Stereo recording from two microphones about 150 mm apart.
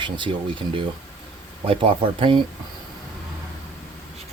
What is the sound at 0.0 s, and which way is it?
Speech, 35° right (ahead or behind).